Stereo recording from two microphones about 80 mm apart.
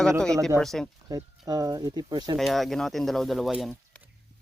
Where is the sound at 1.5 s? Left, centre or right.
Right.